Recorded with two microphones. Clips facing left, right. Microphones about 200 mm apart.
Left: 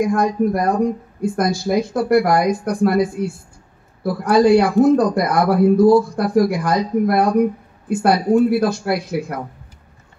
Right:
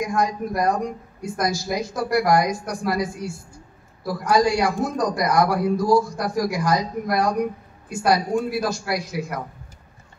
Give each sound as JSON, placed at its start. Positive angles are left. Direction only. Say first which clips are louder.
{"t": 0.0, "sound": "speech", "louder": "left 7 dB", "side_deg": 55}